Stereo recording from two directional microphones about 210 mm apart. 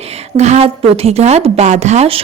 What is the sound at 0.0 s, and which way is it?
Speech, 30° right (ahead or behind).